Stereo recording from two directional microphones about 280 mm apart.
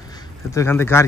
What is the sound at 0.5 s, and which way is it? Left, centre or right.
Speech, centre.